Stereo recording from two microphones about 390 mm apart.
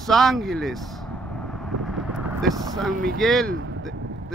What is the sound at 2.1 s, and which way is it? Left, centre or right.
Vehicle, centre.